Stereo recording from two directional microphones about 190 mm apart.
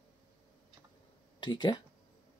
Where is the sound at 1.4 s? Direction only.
25° left (ahead or behind).